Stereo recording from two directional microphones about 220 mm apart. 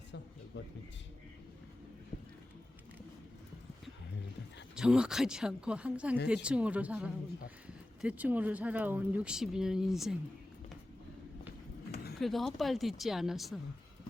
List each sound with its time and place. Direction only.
0.5 s a man's voice: 55° left (ahead or behind)
4.7 s speech: 5° right (ahead or behind)
12.2 s speech: centre (ahead or behind)